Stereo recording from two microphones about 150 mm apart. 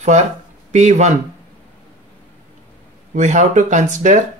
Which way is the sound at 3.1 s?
55° right (ahead or behind).